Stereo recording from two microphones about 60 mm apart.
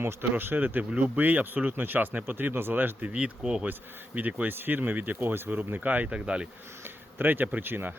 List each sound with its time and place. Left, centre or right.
0.0 s speech: right
3.1 s speech: centre
6.1 s speech: centre
7.2 s speech: right